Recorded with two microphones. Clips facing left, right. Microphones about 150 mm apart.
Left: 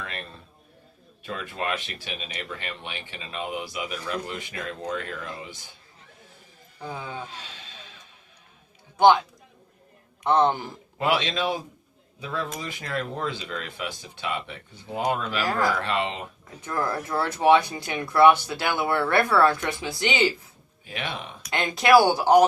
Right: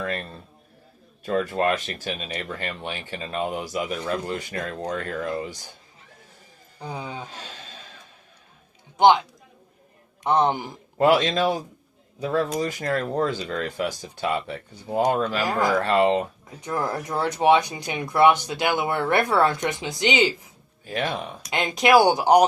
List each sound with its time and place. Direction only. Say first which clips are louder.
0.0 s a sound: right 8 dB; 40° right (ahead or behind)
1.2 s speech: right 9 dB; 40° right (ahead or behind)
6.7 s speech: right 1 dB; 20° right (ahead or behind)
7.3 s speech: right 3 dB; 40° right (ahead or behind)
10.2 s speech: even; 10° right (ahead or behind)
10.9 s speech: right 6 dB; 45° right (ahead or behind)
15.4 s speech: left 1 dB; 20° right (ahead or behind)
15.8 s speech: right 8 dB; 40° right (ahead or behind)
16.6 s speech: right 1 dB; 15° right (ahead or behind)
20.8 s speech: right 7 dB; 40° right (ahead or behind)
21.5 s speech: even; 15° right (ahead or behind)